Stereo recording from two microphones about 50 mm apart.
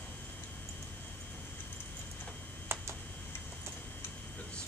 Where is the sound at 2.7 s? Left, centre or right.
Right.